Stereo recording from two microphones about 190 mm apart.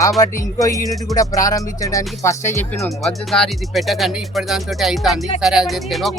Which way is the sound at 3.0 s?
5° left (ahead or behind).